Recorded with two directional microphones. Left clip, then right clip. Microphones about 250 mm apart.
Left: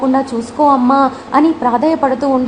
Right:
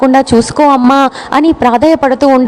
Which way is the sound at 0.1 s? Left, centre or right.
Right.